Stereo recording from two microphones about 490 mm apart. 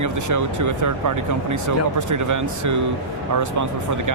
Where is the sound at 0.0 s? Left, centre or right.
Right.